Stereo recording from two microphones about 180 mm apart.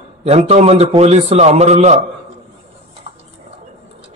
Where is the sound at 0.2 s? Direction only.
35° right (ahead or behind).